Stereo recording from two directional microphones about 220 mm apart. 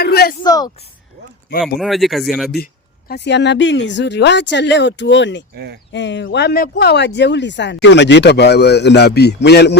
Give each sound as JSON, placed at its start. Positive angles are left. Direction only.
{"t": 0.0, "sound": "a sound", "side_deg": 45}
{"t": 0.4, "sound": "speech", "side_deg": 15}
{"t": 1.8, "sound": "speech", "side_deg": 0}
{"t": 3.1, "sound": "speech", "side_deg": 50}